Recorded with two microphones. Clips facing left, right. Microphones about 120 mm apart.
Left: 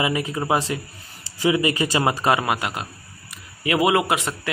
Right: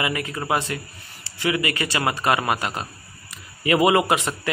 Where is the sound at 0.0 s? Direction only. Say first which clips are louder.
Left 3 dB; 20° left (ahead or behind).